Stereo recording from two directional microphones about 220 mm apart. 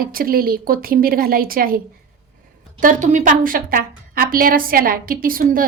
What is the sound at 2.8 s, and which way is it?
A woman's voice, 35° right (ahead or behind).